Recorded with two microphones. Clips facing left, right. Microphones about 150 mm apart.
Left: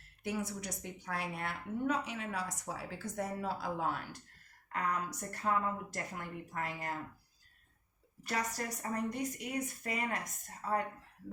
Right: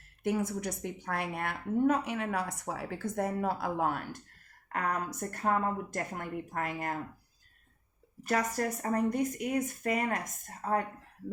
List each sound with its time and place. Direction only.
0.2 s a woman's voice: 50° right (ahead or behind)
8.2 s a woman's voice: 50° right (ahead or behind)